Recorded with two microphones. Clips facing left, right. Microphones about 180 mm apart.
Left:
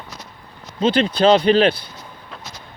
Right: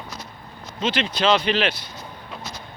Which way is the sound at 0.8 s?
35° left (ahead or behind).